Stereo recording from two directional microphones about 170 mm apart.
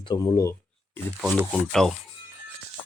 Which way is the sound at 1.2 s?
10° right (ahead or behind).